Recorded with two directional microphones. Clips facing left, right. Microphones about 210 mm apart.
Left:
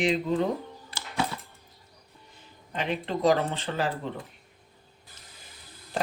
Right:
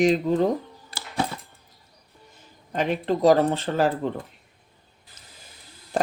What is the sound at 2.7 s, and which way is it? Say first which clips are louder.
Speech: right 6 dB; 45° right (ahead or behind).